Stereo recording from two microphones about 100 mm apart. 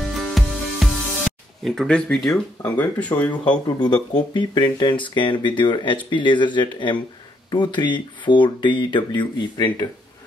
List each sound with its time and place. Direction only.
0.0 s music: centre (ahead or behind)
3.6 s speech: 45° left (ahead or behind)